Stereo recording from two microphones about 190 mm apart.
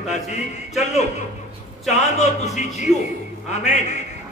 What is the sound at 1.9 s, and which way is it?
Speech, 35° left (ahead or behind).